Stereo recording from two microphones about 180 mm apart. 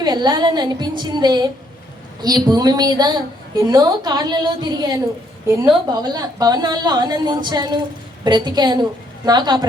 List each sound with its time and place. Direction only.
0.0 s a woman's voice: 25° right (ahead or behind)